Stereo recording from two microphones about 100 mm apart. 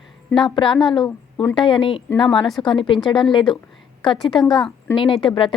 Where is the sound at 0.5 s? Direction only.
55° left (ahead or behind).